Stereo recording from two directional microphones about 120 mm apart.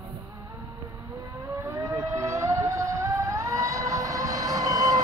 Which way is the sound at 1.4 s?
25° right (ahead or behind).